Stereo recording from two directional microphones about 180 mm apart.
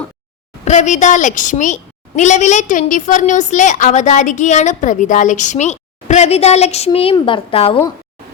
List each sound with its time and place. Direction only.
0.6 s a woman's voice: 40° left (ahead or behind)